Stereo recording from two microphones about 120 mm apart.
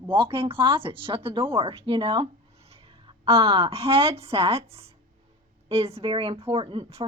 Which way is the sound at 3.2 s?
50° right (ahead or behind).